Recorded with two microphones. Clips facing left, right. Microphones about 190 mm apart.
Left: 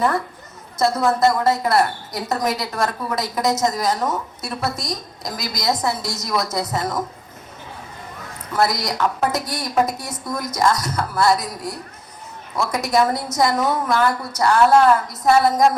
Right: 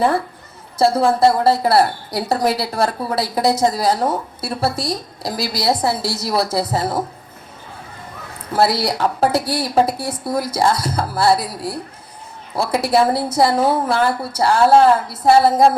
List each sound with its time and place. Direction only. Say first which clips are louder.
0.8 s a woman's voice: right 3 dB; 30° right (ahead or behind)
8.5 s a woman's voice: right 3 dB; 30° right (ahead or behind)